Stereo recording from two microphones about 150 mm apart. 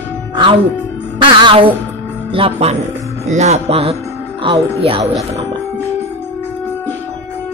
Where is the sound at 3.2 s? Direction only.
45° right (ahead or behind).